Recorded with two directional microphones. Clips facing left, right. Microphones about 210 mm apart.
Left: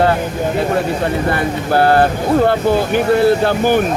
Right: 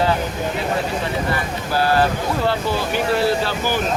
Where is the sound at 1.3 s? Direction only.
55° left (ahead or behind).